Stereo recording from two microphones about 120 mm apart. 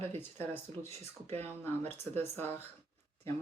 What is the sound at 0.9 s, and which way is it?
Speech, 60° right (ahead or behind).